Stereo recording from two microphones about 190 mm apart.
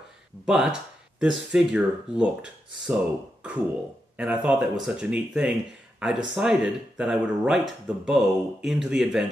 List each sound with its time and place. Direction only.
0.5 s speech: 5° right (ahead or behind)
4.2 s speech: 5° right (ahead or behind)